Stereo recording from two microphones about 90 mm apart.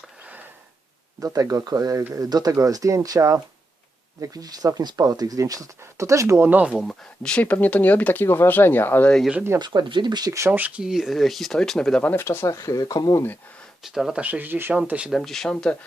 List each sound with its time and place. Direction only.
1.2 s speech: 40° right (ahead or behind)
6.5 s speech: 15° right (ahead or behind)
7.2 s speech: 15° left (ahead or behind)
9.3 s speech: 25° right (ahead or behind)
9.6 s speech: 55° right (ahead or behind)
10.5 s speech: 20° right (ahead or behind)
10.8 s speech: 5° right (ahead or behind)
12.1 s speech: 25° left (ahead or behind); by 13.2 s 45° left (ahead or behind)
13.8 s speech: 5° right (ahead or behind)
14.2 s speech: 20° right (ahead or behind)
15.1 s speech: 5° left (ahead or behind)